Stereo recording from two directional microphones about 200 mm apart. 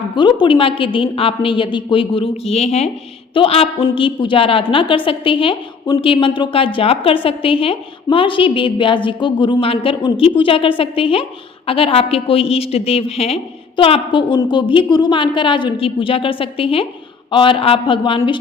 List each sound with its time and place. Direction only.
0.2 s a woman's voice: 25° left (ahead or behind)